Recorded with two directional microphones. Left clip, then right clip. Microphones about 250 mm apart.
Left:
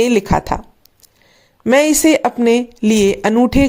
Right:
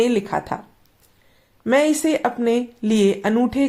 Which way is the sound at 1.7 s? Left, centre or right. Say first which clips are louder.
Left 6 dB; left.